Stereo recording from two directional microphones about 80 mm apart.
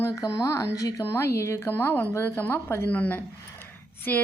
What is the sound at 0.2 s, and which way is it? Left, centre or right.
A woman's voice, left.